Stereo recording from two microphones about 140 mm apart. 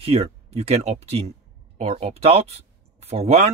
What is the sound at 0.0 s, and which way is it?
Speech, 45° right (ahead or behind).